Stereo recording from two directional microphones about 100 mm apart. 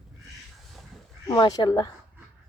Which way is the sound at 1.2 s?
50° left (ahead or behind).